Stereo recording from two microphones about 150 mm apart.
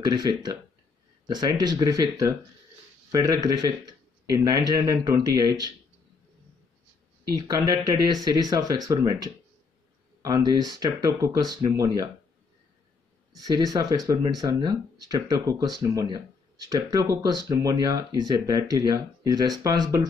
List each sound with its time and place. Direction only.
0.0 s speech: 25° right (ahead or behind)
7.2 s speech: 30° right (ahead or behind)
13.4 s speech: 25° right (ahead or behind)